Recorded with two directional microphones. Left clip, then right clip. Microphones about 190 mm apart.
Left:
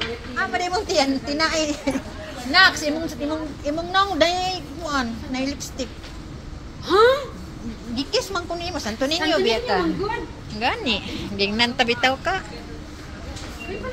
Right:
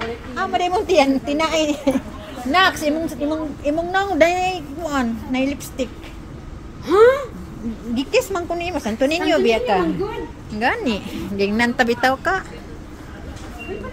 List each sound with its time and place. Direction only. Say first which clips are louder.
0.5 s a woman's voice: right 7 dB; 50° right (ahead or behind)
6.9 s a sound: right 3 dB; 65° right (ahead or behind)
7.9 s a woman's voice: right 4 dB; 50° right (ahead or behind); by 12.4 s 35° right (ahead or behind)